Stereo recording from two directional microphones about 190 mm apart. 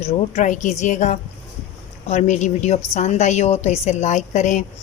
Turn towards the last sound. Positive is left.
turn(degrees=40)  # may be behind; listen again after turning